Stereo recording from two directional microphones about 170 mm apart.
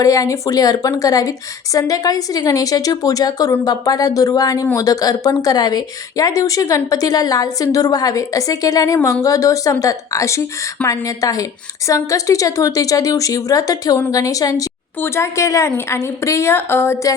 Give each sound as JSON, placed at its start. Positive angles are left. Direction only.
{"t": 0.0, "sound": "speech", "side_deg": 20}